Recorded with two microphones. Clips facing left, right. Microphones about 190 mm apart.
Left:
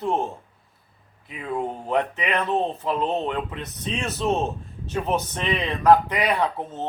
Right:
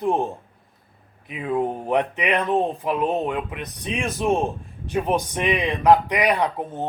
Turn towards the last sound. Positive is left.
turn(degrees=-15)  # may be behind; listen again after turning